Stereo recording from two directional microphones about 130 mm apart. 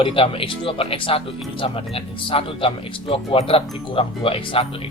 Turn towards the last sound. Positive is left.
turn(degrees=45)  # may be behind; listen again after turning